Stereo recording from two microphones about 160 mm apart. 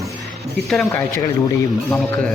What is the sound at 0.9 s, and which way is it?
Speech, 15° left (ahead or behind).